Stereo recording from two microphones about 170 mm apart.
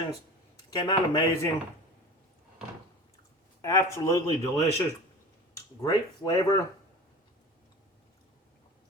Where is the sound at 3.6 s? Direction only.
20° left (ahead or behind).